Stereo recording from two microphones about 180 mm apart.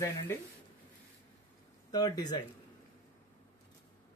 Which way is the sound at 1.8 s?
20° left (ahead or behind).